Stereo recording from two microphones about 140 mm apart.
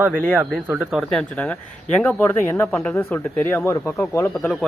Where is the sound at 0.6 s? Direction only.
5° right (ahead or behind); by 4.3 s 15° left (ahead or behind).